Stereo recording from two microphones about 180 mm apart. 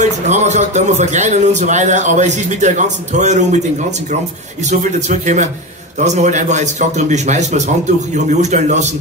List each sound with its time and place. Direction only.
0.0 s a man's voice: 40° right (ahead or behind)
4.6 s a man's voice: 40° right (ahead or behind)